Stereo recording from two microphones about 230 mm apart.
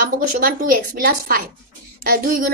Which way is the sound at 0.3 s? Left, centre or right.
Right.